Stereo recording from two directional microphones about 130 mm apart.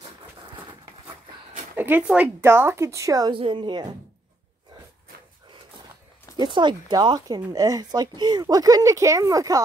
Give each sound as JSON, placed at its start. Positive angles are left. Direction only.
{"t": 1.8, "sound": "speech", "side_deg": -15}
{"t": 3.3, "sound": "speech", "side_deg": -40}
{"t": 6.3, "sound": "speech", "side_deg": -35}